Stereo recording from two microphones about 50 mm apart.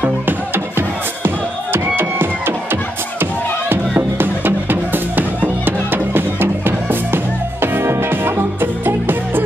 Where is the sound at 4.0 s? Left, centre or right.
Right.